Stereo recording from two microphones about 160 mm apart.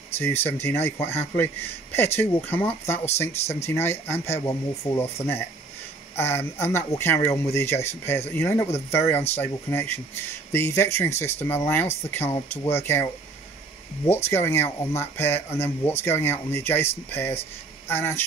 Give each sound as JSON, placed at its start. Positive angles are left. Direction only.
{"t": 0.2, "sound": "speech", "side_deg": 15}
{"t": 6.1, "sound": "speech", "side_deg": 15}
{"t": 14.3, "sound": "speech", "side_deg": 15}